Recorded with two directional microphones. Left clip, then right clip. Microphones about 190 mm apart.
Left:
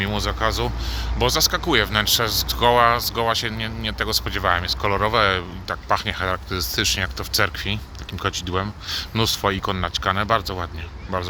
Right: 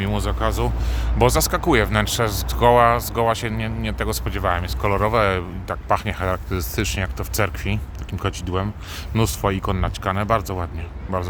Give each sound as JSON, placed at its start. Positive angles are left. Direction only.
{"t": 0.0, "sound": "speech", "side_deg": -5}
{"t": 1.2, "sound": "speech", "side_deg": -30}